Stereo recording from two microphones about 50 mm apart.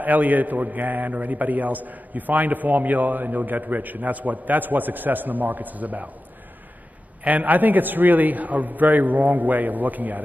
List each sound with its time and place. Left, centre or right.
0.0 s a man's voice: right
7.2 s a man's voice: right